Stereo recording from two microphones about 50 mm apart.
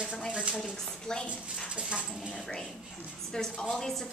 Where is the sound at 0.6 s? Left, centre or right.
Centre.